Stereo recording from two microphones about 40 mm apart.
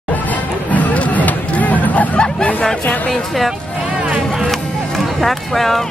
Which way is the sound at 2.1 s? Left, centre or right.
Left.